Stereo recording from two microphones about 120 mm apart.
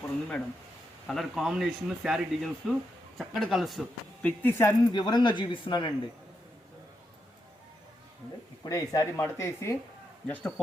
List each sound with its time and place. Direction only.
0.0 s a sound: 10° left (ahead or behind)
1.0 s speech: centre (ahead or behind)
4.2 s speech: 10° left (ahead or behind)
4.9 s speech: 40° left (ahead or behind)
8.6 s speech: 30° left (ahead or behind); by 10.5 s 15° left (ahead or behind)